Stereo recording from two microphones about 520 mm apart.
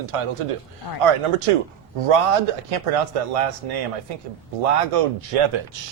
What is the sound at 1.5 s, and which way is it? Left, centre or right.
A man's voice, right.